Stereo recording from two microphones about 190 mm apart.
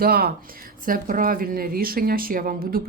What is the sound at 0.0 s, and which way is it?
Speech, 55° right (ahead or behind).